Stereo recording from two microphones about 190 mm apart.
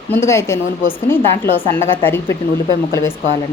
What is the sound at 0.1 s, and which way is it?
A woman's voice, 15° left (ahead or behind).